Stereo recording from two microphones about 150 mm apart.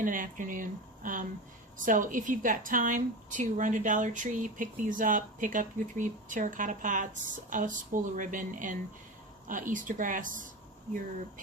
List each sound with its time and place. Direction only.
0.0 s a woman's voice: 65° right (ahead or behind)